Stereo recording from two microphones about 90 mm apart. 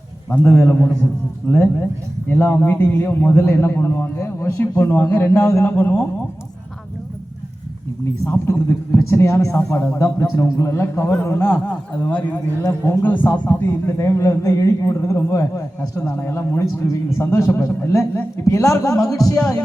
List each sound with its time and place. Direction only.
0.3 s speech: 20° left (ahead or behind); by 4.5 s 35° left (ahead or behind)
4.8 s speech: 20° left (ahead or behind)
8.2 s a man's voice: 30° left (ahead or behind)
11.9 s a man's voice: 20° left (ahead or behind); by 19.4 s 40° left (ahead or behind)